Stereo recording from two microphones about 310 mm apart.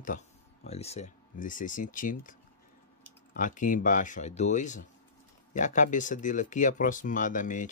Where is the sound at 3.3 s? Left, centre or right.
Left.